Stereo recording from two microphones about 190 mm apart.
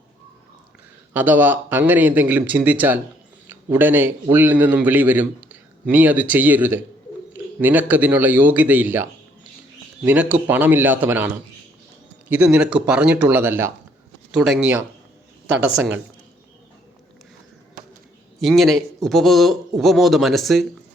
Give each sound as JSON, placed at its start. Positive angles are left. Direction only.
{"t": 1.1, "sound": "a man's voice", "side_deg": -10}
{"t": 12.3, "sound": "a man's voice", "side_deg": -5}
{"t": 18.3, "sound": "a man's voice", "side_deg": 0}